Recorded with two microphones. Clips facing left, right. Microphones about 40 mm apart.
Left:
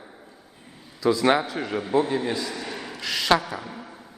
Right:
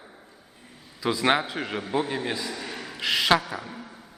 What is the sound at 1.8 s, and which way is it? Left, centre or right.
Speech, centre.